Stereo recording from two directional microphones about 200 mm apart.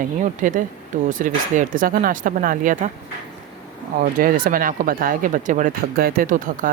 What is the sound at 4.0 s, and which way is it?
Speech, 45° right (ahead or behind).